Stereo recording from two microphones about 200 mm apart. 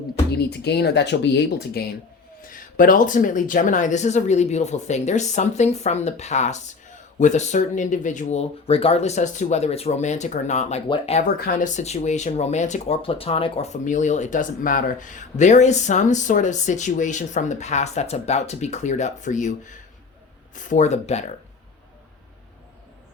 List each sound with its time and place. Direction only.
0.3 s speech: 55° left (ahead or behind)
2.4 s speech: 45° left (ahead or behind)
11.3 s speech: 45° left (ahead or behind)